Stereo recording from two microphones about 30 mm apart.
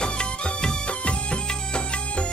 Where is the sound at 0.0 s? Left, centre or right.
Left.